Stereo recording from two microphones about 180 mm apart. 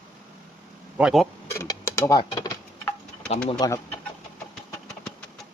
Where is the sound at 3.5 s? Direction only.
20° left (ahead or behind).